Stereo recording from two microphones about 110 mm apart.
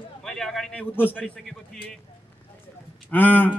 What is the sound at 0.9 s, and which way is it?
Speech, 15° left (ahead or behind).